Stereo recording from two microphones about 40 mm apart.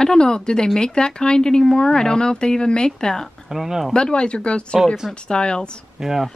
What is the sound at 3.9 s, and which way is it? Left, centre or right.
Speech, left.